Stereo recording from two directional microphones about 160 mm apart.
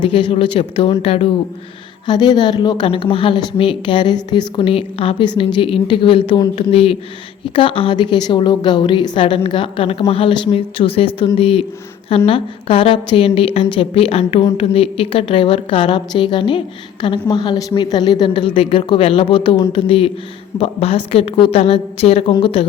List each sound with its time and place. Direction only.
0.1 s a woman's voice: 35° left (ahead or behind)
2.0 s a woman's voice: 25° left (ahead or behind)